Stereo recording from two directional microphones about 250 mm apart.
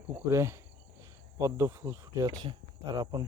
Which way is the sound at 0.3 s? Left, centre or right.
Centre.